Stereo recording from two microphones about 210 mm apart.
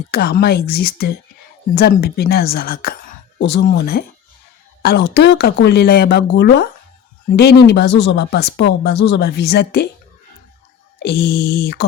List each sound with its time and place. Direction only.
0.1 s speech: 50° left (ahead or behind)
11.0 s speech: 50° left (ahead or behind)